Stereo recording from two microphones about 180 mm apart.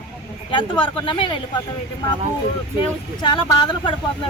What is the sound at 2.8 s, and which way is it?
Speech, 25° left (ahead or behind).